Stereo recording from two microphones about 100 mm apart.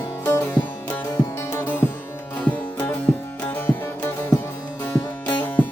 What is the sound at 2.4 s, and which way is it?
Music, 10° left (ahead or behind).